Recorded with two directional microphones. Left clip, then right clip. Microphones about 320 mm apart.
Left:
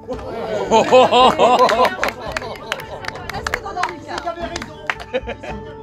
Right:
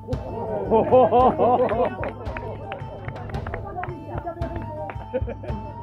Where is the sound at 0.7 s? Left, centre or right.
Left.